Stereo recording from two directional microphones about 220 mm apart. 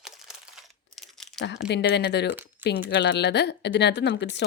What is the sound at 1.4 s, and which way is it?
A woman's voice, 50° left (ahead or behind).